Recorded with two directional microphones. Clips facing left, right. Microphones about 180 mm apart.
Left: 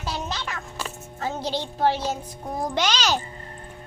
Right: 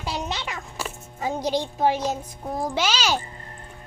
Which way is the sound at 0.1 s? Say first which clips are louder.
Right 1 dB; 20° right (ahead or behind).